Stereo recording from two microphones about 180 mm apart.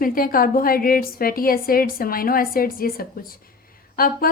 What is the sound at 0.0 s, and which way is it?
A woman's voice, 50° left (ahead or behind).